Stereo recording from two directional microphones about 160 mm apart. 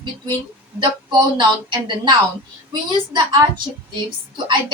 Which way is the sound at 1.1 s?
30° right (ahead or behind).